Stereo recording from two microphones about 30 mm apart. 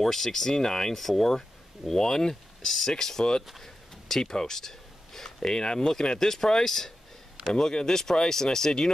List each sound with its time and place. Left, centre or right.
0.0 s speech: centre
1.0 s speech: centre
3.6 s a sound: centre
5.4 s speech: left